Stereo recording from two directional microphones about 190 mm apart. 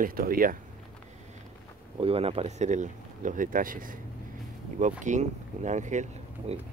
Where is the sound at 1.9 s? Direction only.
30° right (ahead or behind); by 4.0 s 45° right (ahead or behind).